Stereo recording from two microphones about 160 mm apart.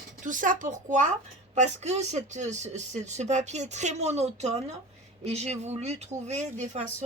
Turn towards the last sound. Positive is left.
turn(degrees=-45)  # may be behind; listen again after turning